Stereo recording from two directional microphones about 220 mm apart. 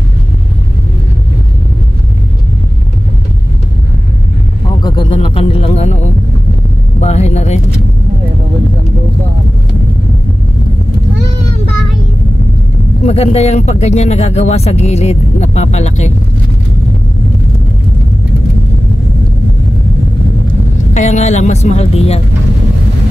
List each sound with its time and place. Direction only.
4.8 s music: 20° left (ahead or behind)
7.0 s vehicle: 30° left (ahead or behind)
13.0 s speech: 30° left (ahead or behind)
20.9 s speech: 30° left (ahead or behind)